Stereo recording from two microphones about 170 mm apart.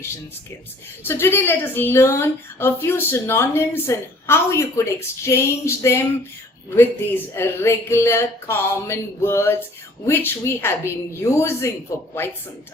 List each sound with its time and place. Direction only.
1.0 s speech: 15° left (ahead or behind)